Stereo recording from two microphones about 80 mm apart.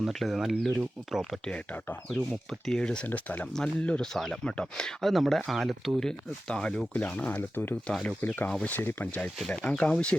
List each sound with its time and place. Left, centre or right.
0.0 s speech: centre
1.2 s speech: centre
2.0 s speech: centre
4.0 s speech: centre